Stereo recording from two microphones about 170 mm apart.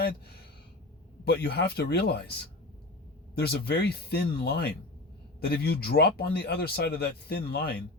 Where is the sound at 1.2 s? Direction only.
70° left (ahead or behind).